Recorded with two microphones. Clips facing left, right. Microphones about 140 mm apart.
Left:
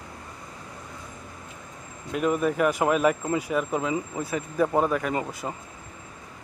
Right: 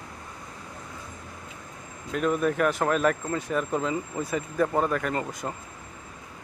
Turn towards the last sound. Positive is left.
turn(degrees=5)  # may be behind; listen again after turning